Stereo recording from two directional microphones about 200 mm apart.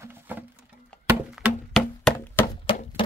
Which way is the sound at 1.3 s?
Centre (ahead or behind).